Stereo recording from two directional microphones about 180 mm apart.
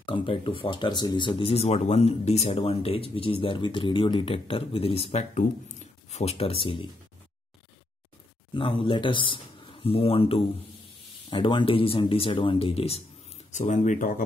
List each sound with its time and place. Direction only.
0.0 s speech: 30° left (ahead or behind)
8.5 s speech: 30° left (ahead or behind); by 14.2 s 50° left (ahead or behind)